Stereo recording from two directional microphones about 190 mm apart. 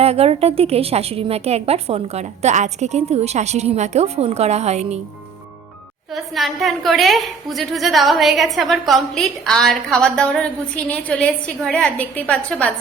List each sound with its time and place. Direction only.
0.0 s a woman's voice: 30° right (ahead or behind)
6.1 s a woman's voice: centre (ahead or behind)